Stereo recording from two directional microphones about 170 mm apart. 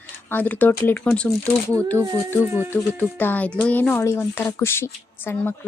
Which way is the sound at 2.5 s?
10° right (ahead or behind).